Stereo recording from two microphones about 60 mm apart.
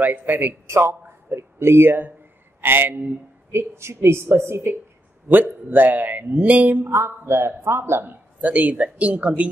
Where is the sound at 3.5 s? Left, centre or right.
Right.